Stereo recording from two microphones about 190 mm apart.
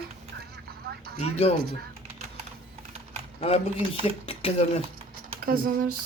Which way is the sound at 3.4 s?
30° left (ahead or behind).